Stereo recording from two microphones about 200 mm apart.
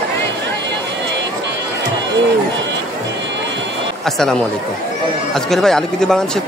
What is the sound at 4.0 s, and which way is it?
Speech, centre (ahead or behind).